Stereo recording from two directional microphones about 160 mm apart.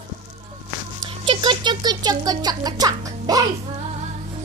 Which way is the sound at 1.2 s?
30° right (ahead or behind).